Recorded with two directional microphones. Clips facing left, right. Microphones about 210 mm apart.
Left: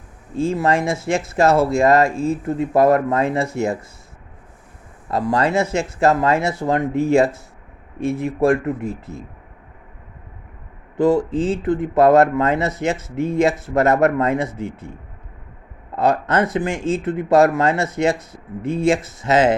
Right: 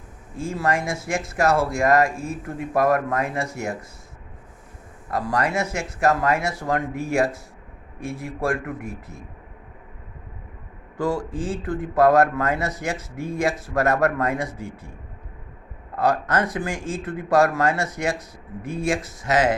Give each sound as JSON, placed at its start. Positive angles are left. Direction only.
{"t": 0.3, "sound": "speech", "side_deg": 25}
{"t": 5.1, "sound": "speech", "side_deg": 25}
{"t": 10.9, "sound": "speech", "side_deg": 20}
{"t": 16.0, "sound": "speech", "side_deg": 25}